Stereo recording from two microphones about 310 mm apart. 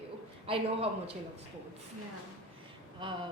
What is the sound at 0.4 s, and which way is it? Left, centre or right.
Speech, centre.